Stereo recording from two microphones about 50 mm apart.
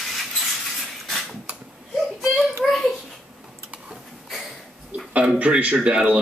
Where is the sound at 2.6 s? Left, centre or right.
Centre.